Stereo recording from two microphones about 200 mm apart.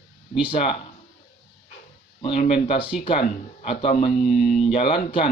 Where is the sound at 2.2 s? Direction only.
30° left (ahead or behind).